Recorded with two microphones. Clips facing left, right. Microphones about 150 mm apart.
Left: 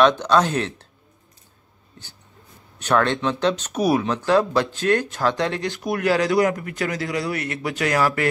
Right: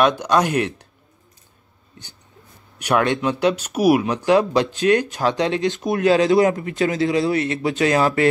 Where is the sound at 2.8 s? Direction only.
10° right (ahead or behind).